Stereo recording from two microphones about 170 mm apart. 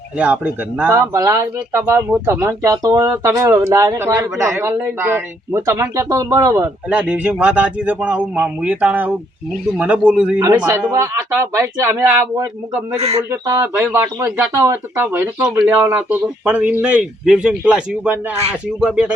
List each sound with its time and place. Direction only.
0.2 s speech: 10° right (ahead or behind)
6.8 s speech: 5° right (ahead or behind)
13.0 s speech: 35° right (ahead or behind)
13.3 s speech: 20° right (ahead or behind)